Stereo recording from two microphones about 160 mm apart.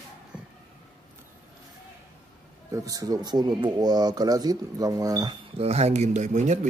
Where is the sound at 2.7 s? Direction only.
20° right (ahead or behind).